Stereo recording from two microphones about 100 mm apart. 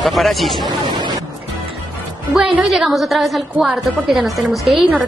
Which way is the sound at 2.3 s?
5° right (ahead or behind).